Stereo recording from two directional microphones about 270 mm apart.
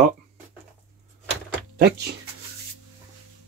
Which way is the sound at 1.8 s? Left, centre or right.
Right.